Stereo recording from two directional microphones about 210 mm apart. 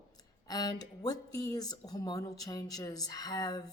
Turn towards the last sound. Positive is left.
turn(degrees=20)  # may be behind; listen again after turning